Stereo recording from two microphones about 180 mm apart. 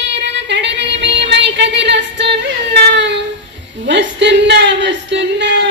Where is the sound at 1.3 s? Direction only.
75° right (ahead or behind).